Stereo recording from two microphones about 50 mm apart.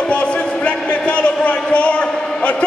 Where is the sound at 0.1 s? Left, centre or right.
Left.